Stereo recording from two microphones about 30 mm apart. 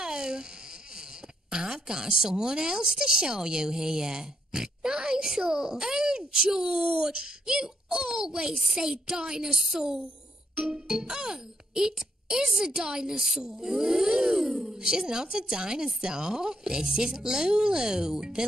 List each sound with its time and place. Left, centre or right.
0.0 s a sound: right
1.5 s a woman's voice: right
9.8 s a sound: right
10.9 s a child's voice: right
13.1 s a woman's voice: centre
13.4 s a woman's voice: right